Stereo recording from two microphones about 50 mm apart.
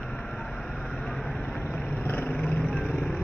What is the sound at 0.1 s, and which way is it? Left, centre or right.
Vehicle, centre.